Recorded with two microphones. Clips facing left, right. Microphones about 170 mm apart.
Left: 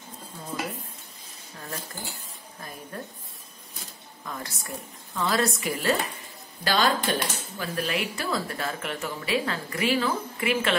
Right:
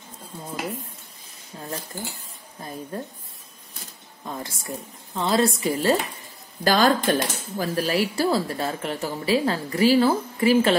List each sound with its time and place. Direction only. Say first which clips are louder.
2.9 s speech: right 5 dB; 30° right (ahead or behind)
4.2 s speech: right 4 dB; 25° right (ahead or behind)
6.6 s a woman's voice: right 5 dB; 45° right (ahead or behind)